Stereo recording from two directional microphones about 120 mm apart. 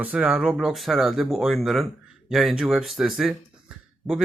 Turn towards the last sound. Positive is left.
turn(degrees=-5)  # may be behind; listen again after turning